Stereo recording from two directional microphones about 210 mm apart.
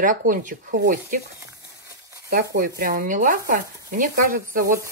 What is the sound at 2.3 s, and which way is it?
Speech, 45° right (ahead or behind).